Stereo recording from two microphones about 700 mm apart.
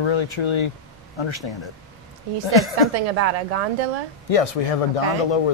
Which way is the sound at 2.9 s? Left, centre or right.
Right.